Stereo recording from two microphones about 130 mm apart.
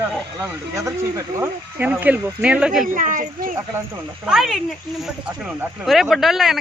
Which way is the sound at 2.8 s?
90° right.